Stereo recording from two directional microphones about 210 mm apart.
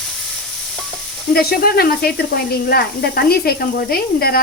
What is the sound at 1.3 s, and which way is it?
Speech, 45° left (ahead or behind).